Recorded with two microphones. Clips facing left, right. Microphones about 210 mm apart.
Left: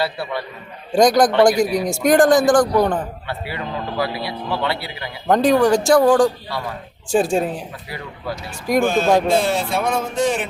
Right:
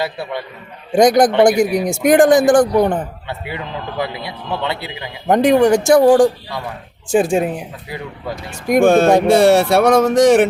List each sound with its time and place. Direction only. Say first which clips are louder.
0.0 s a man's voice: right 1 dB; 20° right (ahead or behind)
7.1 s speech: right 3 dB; 5° right (ahead or behind)
8.6 s speech: right 6 dB; 50° right (ahead or behind)
9.3 s speech: right 8 dB; 75° right (ahead or behind)